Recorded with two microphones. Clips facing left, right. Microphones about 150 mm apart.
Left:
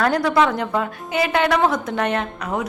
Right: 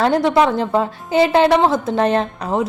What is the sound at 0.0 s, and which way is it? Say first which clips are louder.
A woman's voice: right 3 dB; 25° right (ahead or behind).